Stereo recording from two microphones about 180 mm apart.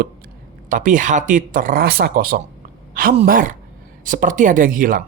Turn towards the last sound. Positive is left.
turn(degrees=-50)  # may be behind; listen again after turning